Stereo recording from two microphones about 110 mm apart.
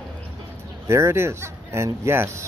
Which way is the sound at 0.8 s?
25° right (ahead or behind).